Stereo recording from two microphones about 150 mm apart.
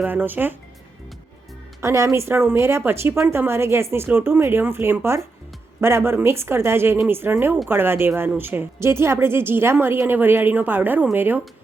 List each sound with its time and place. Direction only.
0.0 s speech: 15° right (ahead or behind)
1.8 s speech: 20° right (ahead or behind)